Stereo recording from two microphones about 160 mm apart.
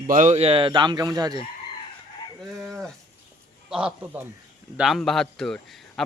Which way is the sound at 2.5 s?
Centre (ahead or behind).